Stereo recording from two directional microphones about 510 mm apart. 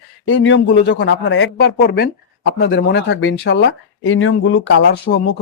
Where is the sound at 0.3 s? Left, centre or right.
Left.